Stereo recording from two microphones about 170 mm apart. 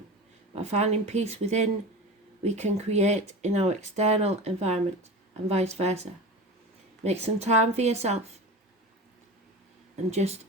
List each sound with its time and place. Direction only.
0.6 s speech: 40° right (ahead or behind)
10.1 s speech: 40° right (ahead or behind)